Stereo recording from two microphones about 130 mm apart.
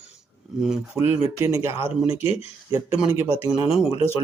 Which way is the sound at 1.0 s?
20° right (ahead or behind).